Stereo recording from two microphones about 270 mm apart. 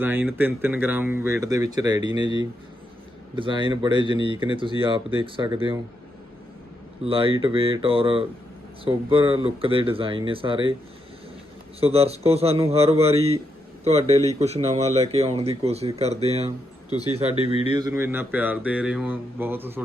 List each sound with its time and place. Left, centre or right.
0.0 s speech: centre
3.3 s speech: centre
7.0 s speech: centre
11.8 s speech: right